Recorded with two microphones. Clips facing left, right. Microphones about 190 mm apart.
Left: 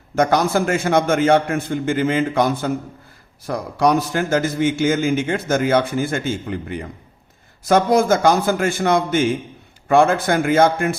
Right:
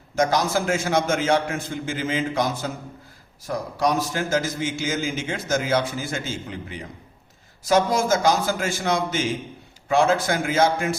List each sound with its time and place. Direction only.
0.2 s a man's voice: 60° left (ahead or behind)